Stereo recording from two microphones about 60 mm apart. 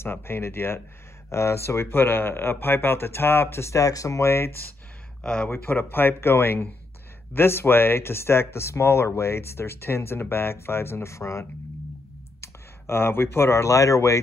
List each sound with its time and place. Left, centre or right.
0.0 s speech: left
3.8 s speech: left
5.2 s speech: left
5.5 s speech: left